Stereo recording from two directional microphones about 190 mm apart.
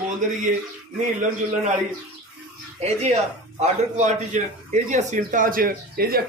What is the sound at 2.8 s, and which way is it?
A man's voice, 35° right (ahead or behind).